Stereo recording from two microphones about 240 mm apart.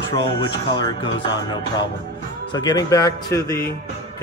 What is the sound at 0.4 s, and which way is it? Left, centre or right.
Speech, centre.